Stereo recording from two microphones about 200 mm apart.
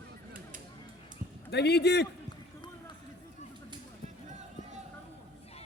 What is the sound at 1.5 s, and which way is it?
Speech, 55° left (ahead or behind).